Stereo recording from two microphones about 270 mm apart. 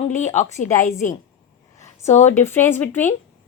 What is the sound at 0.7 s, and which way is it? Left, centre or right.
Speech, centre.